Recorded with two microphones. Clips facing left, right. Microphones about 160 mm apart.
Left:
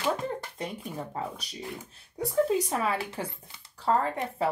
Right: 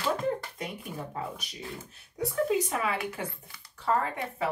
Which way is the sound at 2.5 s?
30° left (ahead or behind).